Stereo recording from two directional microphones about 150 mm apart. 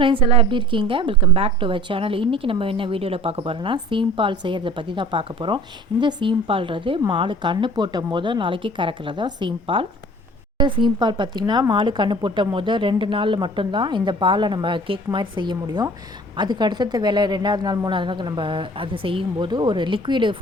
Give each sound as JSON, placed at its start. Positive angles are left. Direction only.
{"t": 0.0, "sound": "a woman's voice", "side_deg": -35}